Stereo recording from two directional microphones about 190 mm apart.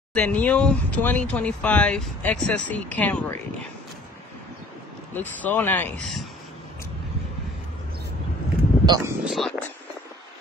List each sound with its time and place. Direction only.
0.1 s speech: 5° left (ahead or behind)
5.1 s speech: 10° left (ahead or behind)
8.8 s speech: 20° right (ahead or behind)
9.2 s speech: centre (ahead or behind)